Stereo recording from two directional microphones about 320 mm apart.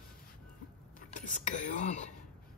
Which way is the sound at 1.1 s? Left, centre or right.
Left.